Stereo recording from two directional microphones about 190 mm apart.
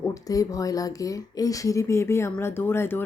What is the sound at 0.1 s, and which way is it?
Speech, 20° left (ahead or behind).